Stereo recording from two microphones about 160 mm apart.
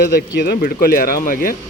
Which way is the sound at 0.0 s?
85° left.